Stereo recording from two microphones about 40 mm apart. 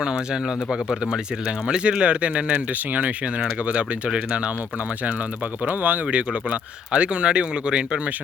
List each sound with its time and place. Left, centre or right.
0.7 s speech: centre
5.6 s speech: right
6.1 s speech: right